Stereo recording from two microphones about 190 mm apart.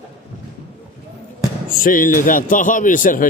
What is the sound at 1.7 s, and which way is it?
A man's voice, 45° left (ahead or behind).